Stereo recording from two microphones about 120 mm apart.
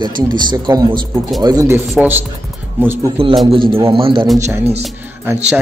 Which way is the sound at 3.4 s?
45° right (ahead or behind).